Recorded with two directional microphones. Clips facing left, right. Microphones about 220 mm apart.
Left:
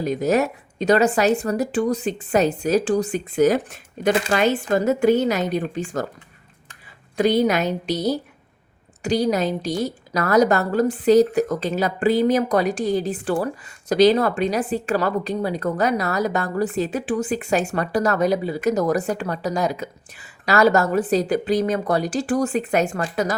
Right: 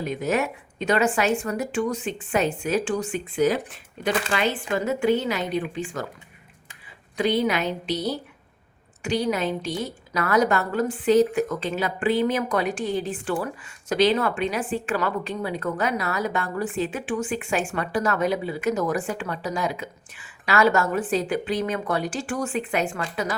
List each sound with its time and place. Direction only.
0.0 s a woman's voice: 40° left (ahead or behind)
7.2 s a woman's voice: 40° left (ahead or behind)